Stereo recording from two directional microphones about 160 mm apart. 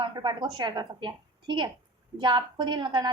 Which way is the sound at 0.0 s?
30° right (ahead or behind).